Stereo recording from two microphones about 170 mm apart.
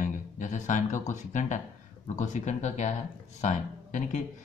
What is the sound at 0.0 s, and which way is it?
Speech, 50° left (ahead or behind).